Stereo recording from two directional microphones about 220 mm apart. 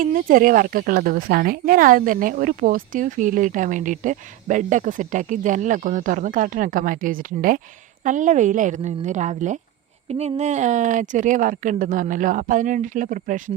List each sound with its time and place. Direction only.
0.0 s speech: 40° right (ahead or behind)